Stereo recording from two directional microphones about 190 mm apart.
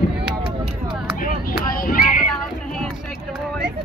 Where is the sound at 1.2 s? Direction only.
50° left (ahead or behind).